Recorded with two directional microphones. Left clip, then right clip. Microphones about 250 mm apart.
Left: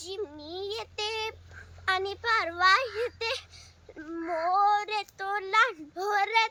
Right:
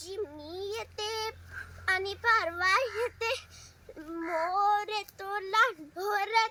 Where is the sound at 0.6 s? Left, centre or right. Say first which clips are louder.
Left 2 dB; centre.